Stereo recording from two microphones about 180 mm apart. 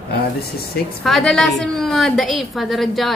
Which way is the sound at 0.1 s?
60° left (ahead or behind).